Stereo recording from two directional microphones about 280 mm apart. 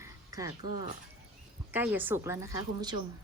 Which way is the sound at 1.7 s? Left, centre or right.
Centre.